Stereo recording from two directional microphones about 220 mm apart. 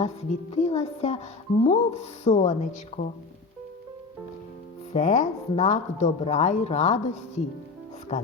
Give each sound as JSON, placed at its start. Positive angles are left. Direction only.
{"t": 0.0, "sound": "music", "side_deg": 30}
{"t": 4.9, "sound": "music", "side_deg": 35}